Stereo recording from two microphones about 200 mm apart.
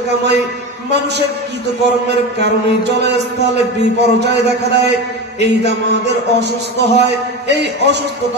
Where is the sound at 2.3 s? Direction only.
55° right (ahead or behind).